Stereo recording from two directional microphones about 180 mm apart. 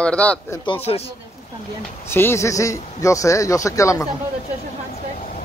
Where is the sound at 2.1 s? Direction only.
15° left (ahead or behind).